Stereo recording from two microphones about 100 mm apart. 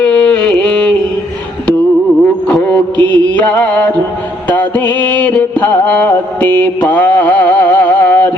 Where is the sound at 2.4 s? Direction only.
10° left (ahead or behind).